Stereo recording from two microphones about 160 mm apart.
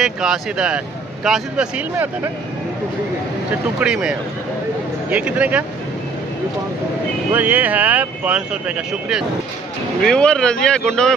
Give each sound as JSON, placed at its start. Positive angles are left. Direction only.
{"t": 0.0, "sound": "speech", "side_deg": -5}
{"t": 3.8, "sound": "speech", "side_deg": -5}
{"t": 7.3, "sound": "speech", "side_deg": -10}
{"t": 10.0, "sound": "speech", "side_deg": 5}